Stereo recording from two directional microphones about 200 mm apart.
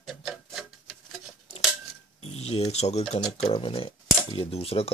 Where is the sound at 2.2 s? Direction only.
30° left (ahead or behind).